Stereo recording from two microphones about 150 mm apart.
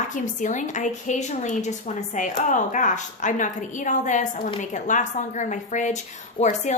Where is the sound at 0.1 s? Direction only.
55° left (ahead or behind).